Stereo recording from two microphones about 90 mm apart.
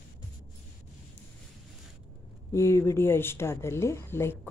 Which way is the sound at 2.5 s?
30° left (ahead or behind).